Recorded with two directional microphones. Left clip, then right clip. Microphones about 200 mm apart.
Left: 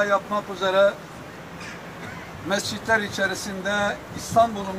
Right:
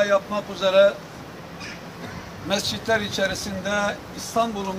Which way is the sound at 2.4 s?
40° right (ahead or behind).